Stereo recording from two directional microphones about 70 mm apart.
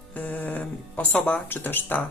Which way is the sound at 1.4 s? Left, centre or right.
Left.